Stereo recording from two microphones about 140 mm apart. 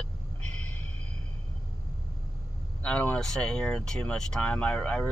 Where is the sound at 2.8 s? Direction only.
10° left (ahead or behind).